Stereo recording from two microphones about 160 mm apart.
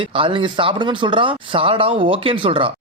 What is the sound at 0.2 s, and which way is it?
Speech, 30° right (ahead or behind).